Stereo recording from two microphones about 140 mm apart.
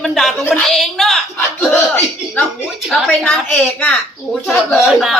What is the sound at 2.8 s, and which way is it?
A child's voice, centre (ahead or behind).